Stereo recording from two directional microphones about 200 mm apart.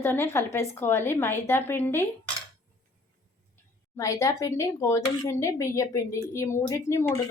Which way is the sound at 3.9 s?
15° left (ahead or behind).